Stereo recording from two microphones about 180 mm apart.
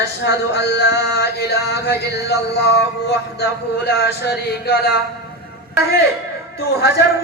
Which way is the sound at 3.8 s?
65° left (ahead or behind).